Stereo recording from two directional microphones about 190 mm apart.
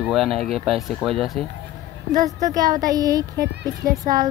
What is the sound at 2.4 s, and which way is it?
Speech, 20° right (ahead or behind).